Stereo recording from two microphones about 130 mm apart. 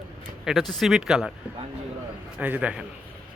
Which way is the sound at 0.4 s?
Centre (ahead or behind).